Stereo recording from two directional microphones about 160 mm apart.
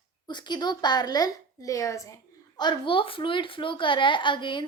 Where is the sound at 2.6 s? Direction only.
30° left (ahead or behind).